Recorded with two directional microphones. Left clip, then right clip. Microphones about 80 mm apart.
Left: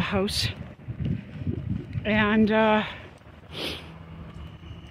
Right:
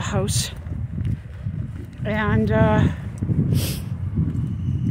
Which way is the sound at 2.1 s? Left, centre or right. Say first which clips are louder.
Even; left.